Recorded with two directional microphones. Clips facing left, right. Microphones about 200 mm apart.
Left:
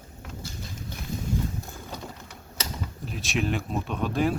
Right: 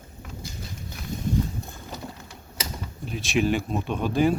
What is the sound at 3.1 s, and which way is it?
Speech, centre (ahead or behind).